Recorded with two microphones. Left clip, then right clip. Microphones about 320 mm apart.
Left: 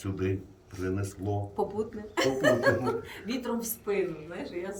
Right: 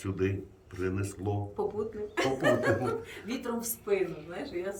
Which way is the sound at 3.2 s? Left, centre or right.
Centre.